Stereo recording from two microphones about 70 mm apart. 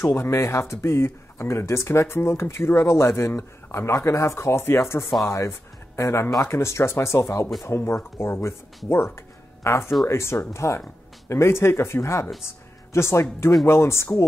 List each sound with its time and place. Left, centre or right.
0.0 s speech: left